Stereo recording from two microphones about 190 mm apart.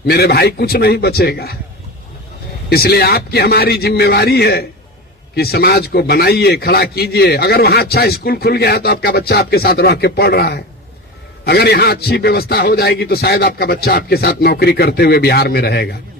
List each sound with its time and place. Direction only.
0.0 s a man's voice: 55° left (ahead or behind)
2.6 s a man's voice: 55° left (ahead or behind)